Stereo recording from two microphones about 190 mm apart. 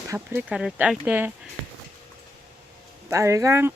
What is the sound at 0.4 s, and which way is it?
Speech, 5° right (ahead or behind).